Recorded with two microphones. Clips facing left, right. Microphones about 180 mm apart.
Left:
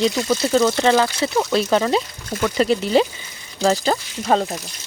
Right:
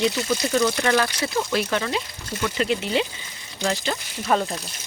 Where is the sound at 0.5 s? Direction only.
30° left (ahead or behind).